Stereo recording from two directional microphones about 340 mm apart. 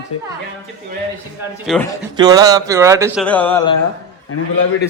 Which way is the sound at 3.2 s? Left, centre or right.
Centre.